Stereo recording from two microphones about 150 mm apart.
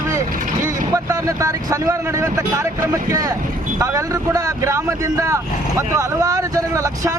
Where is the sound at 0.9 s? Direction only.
20° right (ahead or behind).